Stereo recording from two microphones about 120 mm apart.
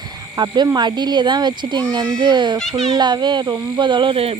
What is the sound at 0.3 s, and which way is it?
A child's voice, 35° right (ahead or behind).